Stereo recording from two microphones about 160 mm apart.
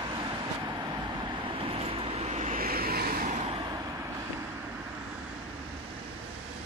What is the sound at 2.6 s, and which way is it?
Vehicle, 70° right (ahead or behind).